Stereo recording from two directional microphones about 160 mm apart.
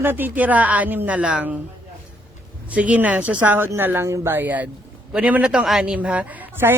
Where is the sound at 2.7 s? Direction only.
10° right (ahead or behind).